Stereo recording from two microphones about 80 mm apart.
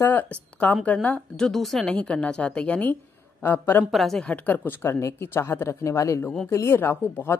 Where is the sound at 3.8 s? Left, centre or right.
Centre.